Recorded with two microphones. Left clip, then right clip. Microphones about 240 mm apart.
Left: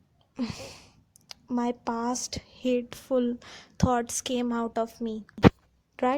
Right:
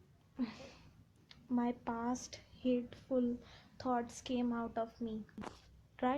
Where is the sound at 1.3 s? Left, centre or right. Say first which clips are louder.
Left 8 dB; left.